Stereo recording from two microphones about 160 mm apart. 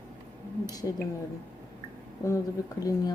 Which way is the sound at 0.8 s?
25° left (ahead or behind).